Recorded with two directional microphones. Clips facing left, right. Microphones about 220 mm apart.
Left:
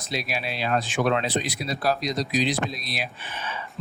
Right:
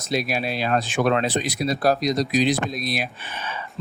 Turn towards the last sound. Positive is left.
turn(degrees=-50)  # may be behind; listen again after turning